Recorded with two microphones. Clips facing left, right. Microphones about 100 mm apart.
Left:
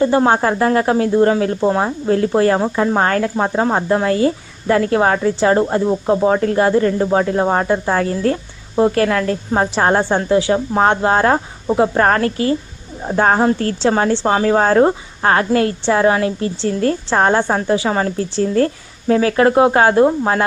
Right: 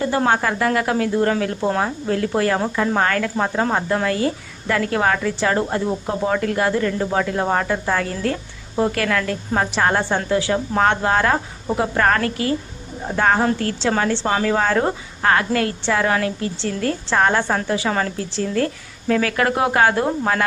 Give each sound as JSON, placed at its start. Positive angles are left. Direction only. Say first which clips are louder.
{"t": 0.0, "sound": "speech", "louder": "left 5 dB", "side_deg": 25}